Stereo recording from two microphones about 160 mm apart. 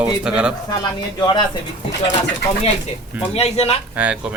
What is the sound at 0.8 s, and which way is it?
Speech, 25° left (ahead or behind).